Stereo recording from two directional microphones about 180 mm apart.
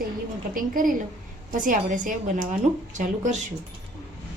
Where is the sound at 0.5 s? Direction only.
50° right (ahead or behind).